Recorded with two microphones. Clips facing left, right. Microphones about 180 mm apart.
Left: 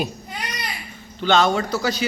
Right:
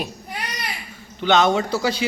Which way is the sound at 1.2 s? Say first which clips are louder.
Right 1 dB; 20° right (ahead or behind).